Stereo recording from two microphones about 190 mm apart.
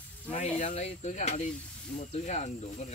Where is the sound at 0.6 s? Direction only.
35° left (ahead or behind).